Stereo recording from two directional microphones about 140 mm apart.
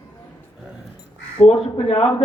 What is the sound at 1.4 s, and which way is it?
Speech, 45° left (ahead or behind).